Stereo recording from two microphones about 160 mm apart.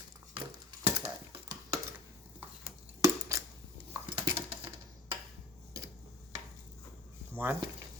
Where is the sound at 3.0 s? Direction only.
20° right (ahead or behind).